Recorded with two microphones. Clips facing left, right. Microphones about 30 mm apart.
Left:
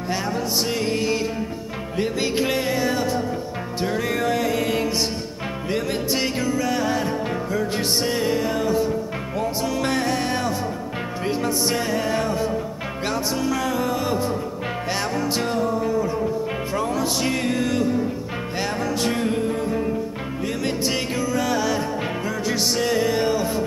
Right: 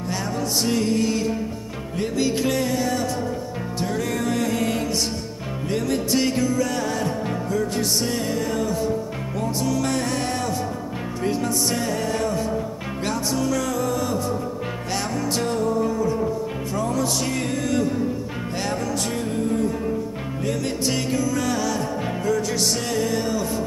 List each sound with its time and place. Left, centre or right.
0.1 s music: centre
10.0 s music: centre